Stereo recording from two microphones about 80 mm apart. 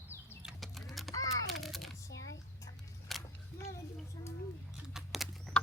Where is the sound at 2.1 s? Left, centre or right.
Left.